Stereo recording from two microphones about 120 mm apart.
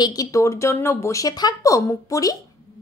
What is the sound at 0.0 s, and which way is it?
A woman's voice, 30° left (ahead or behind).